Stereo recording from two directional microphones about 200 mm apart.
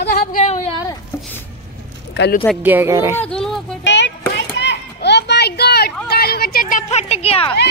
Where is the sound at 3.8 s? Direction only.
65° left (ahead or behind); by 7.5 s 30° left (ahead or behind).